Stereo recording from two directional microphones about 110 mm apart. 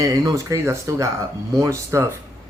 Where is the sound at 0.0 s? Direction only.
30° right (ahead or behind).